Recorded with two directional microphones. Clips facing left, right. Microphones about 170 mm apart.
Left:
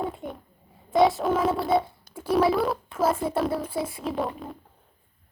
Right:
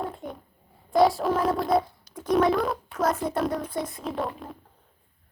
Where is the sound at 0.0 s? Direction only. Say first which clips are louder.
Left 2 dB; centre (ahead or behind).